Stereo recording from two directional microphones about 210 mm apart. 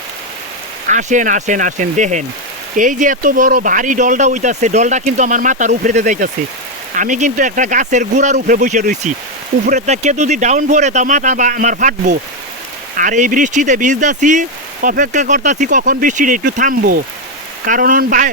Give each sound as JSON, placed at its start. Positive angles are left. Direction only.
{"t": 0.9, "sound": "speech", "side_deg": -35}